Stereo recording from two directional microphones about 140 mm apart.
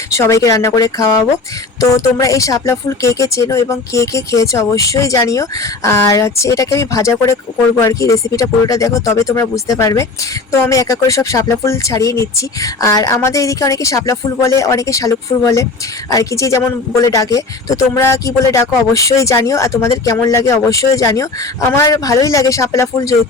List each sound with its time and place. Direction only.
0.1 s speech: 20° left (ahead or behind)